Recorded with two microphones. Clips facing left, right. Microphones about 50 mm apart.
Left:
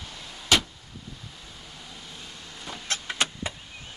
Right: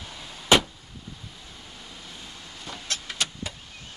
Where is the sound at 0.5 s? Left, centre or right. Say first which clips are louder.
Right 4 dB; right.